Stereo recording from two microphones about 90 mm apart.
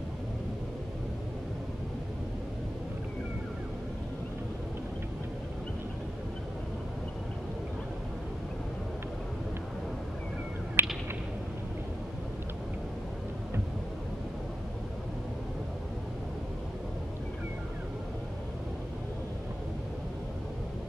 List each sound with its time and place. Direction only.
10.8 s whip: 25° right (ahead or behind)